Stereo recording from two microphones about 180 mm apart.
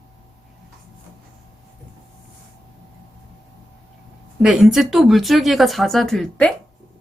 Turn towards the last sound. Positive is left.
turn(degrees=0)  # may be behind; listen again after turning